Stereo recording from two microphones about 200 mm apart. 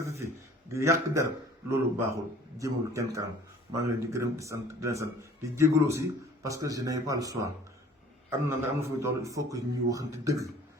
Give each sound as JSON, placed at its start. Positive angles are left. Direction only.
{"t": 0.0, "sound": "a sound", "side_deg": -15}
{"t": 0.7, "sound": "a man's voice", "side_deg": -15}
{"t": 8.4, "sound": "a man's voice", "side_deg": -15}